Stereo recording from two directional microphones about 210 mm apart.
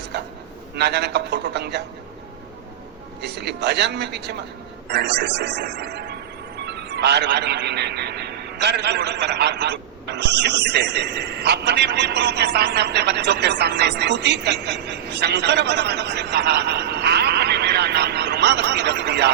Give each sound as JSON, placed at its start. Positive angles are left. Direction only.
{"t": 0.8, "sound": "a man's voice", "side_deg": -55}
{"t": 3.2, "sound": "a man's voice", "side_deg": -55}